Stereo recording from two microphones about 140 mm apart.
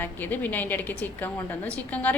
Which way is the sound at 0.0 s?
15° left (ahead or behind).